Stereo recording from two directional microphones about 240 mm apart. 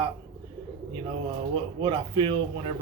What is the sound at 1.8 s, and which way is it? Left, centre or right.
Speech, centre.